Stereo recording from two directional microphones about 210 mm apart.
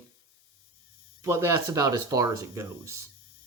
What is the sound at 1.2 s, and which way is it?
Speech, 15° right (ahead or behind).